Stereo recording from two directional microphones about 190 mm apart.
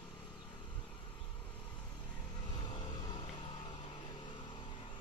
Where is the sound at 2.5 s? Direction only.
25° left (ahead or behind).